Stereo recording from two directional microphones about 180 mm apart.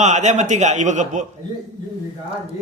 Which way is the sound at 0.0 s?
40° right (ahead or behind).